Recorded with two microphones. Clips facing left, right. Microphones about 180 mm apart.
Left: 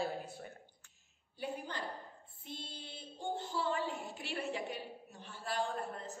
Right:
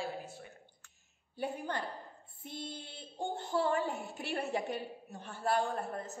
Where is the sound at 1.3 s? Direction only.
55° right (ahead or behind).